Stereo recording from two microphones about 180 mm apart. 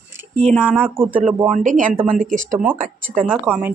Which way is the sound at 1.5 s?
45° right (ahead or behind).